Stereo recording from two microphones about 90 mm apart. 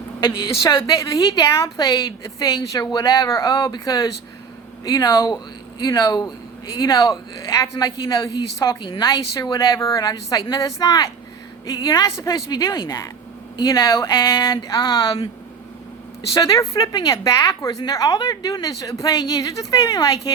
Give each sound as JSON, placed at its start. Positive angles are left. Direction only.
{"t": 0.8, "sound": "a woman's voice", "side_deg": 40}
{"t": 3.1, "sound": "a woman's voice", "side_deg": 35}
{"t": 3.5, "sound": "a woman's voice", "side_deg": 55}
{"t": 16.3, "sound": "a woman's voice", "side_deg": 40}